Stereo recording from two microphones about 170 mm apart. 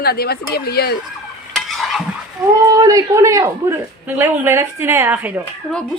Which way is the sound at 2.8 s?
20° right (ahead or behind).